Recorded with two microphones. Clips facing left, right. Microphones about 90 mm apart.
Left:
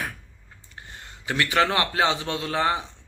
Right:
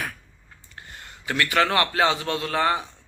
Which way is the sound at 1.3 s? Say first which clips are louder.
Even; 25° left (ahead or behind).